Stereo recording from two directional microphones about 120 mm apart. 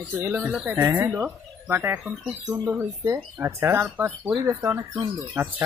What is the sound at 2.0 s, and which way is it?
Speech, centre (ahead or behind).